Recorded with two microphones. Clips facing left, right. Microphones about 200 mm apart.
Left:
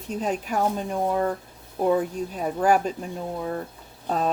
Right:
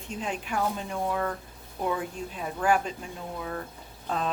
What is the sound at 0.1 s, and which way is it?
Speech, 40° left (ahead or behind).